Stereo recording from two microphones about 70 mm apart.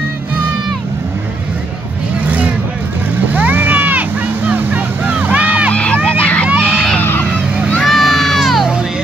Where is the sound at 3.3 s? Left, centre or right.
Right.